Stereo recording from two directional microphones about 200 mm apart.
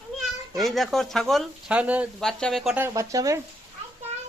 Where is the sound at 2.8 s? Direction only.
15° right (ahead or behind).